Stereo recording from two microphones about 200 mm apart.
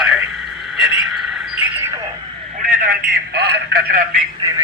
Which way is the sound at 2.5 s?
40° right (ahead or behind).